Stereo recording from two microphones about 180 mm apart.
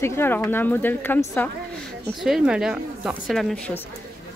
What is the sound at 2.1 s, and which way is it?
Speech, centre (ahead or behind).